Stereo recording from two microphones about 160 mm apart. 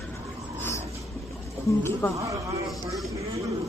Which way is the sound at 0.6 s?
15° left (ahead or behind).